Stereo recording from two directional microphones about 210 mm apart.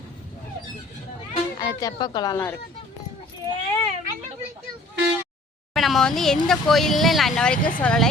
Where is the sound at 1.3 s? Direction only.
15° left (ahead or behind).